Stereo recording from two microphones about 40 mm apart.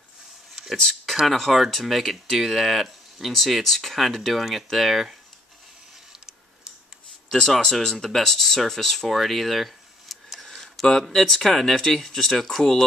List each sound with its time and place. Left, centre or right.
1.2 s speech: centre
7.3 s speech: centre
8.6 s a sound: centre
10.6 s speech: centre